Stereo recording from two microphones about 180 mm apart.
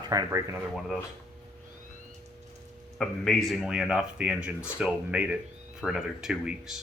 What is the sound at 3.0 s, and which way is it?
A man's voice, centre (ahead or behind).